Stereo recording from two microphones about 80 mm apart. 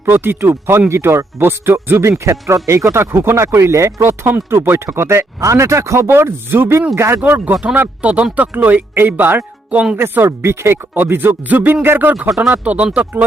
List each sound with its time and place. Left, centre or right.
0.0 s speech: right
7.2 s speech: right